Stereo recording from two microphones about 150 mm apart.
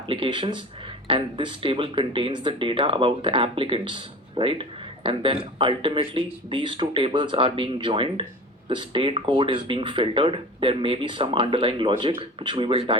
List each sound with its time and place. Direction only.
0.1 s speech: 35° right (ahead or behind)